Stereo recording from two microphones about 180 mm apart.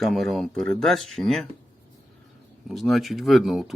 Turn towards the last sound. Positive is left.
turn(degrees=0)  # may be behind; listen again after turning